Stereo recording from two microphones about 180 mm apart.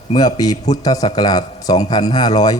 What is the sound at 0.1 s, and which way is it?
A man's voice, 20° left (ahead or behind).